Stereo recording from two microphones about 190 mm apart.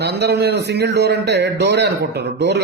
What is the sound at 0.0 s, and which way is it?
A man's voice, 60° right (ahead or behind).